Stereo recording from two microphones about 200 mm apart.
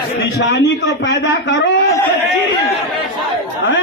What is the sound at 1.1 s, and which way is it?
Speech, 65° left (ahead or behind).